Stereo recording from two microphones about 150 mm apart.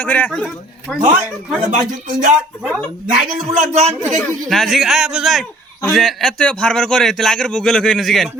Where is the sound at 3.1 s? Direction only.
65° right (ahead or behind); by 3.9 s 50° right (ahead or behind).